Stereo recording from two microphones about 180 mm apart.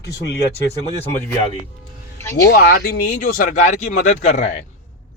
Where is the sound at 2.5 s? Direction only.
55° left (ahead or behind); by 4.5 s 40° left (ahead or behind).